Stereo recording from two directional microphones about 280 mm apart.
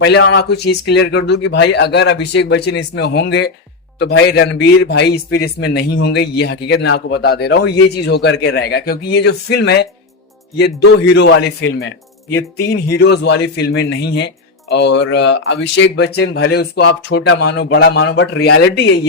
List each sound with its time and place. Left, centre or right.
0.0 s a man's voice: left